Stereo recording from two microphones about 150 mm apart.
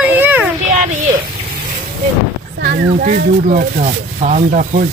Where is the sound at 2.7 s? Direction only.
70° right (ahead or behind).